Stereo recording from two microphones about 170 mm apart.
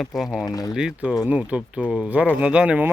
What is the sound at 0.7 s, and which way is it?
Speech, 5° right (ahead or behind).